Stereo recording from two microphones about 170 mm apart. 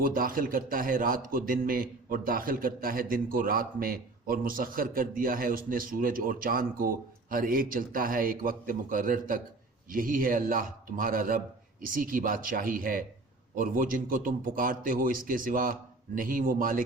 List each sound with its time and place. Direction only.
0.0 s a man's voice: 55° right (ahead or behind)